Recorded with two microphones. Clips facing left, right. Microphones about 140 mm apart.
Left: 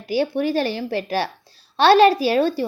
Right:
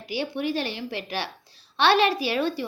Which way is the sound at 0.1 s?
40° left (ahead or behind).